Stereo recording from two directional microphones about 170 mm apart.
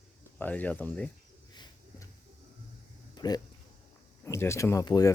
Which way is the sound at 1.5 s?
20° left (ahead or behind).